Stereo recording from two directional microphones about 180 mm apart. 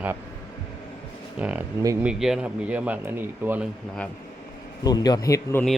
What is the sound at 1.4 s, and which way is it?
Speech, 10° right (ahead or behind).